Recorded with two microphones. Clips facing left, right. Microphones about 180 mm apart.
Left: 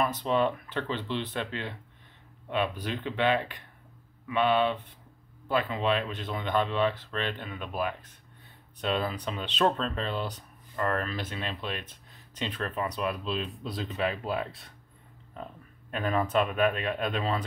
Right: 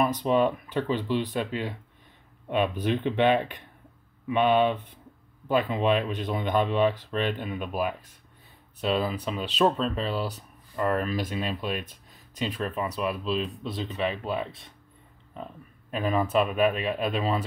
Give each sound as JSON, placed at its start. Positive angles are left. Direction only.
{"t": 0.0, "sound": "speech", "side_deg": -15}